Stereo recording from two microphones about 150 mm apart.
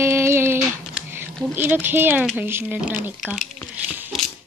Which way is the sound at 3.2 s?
Centre (ahead or behind).